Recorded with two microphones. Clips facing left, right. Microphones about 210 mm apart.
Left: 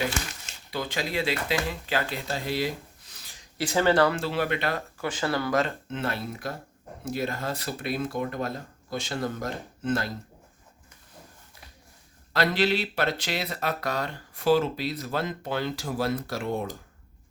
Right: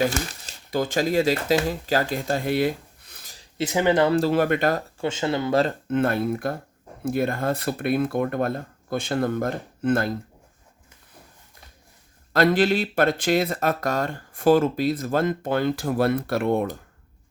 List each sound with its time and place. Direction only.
0.0 s speech: 40° right (ahead or behind)
3.6 s speech: 20° right (ahead or behind)
4.1 s speech: 45° right (ahead or behind)
4.9 s speech: 25° right (ahead or behind)
5.9 s speech: 55° right (ahead or behind)
12.3 s speech: 50° right (ahead or behind)